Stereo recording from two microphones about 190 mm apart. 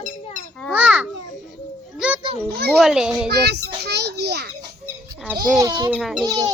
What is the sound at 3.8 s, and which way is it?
Children playing, 60° right (ahead or behind).